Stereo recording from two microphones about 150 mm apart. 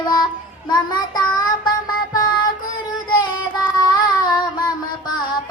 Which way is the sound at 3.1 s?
30° left (ahead or behind).